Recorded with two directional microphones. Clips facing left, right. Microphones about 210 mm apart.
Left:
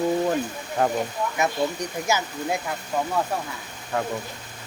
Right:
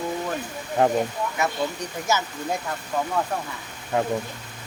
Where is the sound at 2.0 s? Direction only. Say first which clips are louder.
Even; 10° left (ahead or behind).